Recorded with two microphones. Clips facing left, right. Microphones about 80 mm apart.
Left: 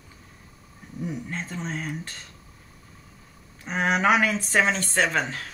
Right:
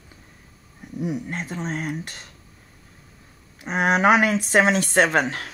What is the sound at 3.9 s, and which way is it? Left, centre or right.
Speech, right.